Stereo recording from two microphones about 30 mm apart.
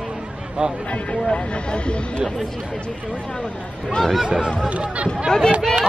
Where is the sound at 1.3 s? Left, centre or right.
Left.